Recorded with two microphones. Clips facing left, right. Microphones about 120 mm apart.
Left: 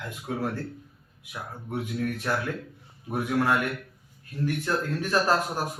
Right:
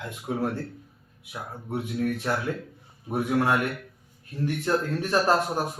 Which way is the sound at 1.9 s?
30° right (ahead or behind).